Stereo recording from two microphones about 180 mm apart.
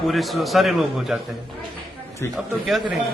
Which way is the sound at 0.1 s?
Centre (ahead or behind).